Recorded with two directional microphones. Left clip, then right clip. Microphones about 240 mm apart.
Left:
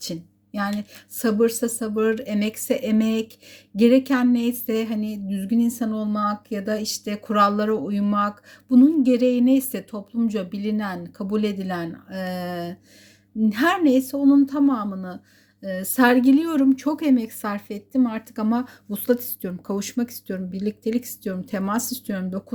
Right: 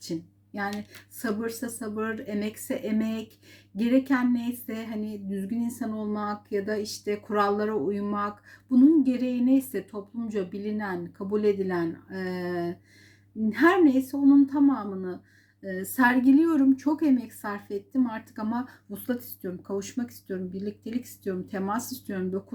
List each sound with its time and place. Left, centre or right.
0.5 s a woman's voice: left